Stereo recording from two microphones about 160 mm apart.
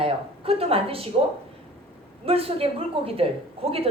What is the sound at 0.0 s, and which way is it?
Speech, 35° right (ahead or behind).